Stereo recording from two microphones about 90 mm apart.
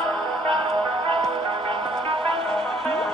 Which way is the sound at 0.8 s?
80° right.